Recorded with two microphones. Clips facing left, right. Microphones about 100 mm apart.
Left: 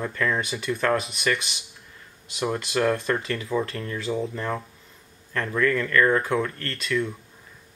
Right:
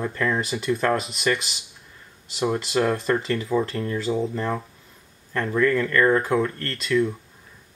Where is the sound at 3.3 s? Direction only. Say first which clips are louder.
Right 3 dB; centre (ahead or behind).